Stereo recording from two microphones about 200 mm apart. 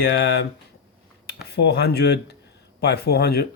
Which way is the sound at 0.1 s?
55° left (ahead or behind).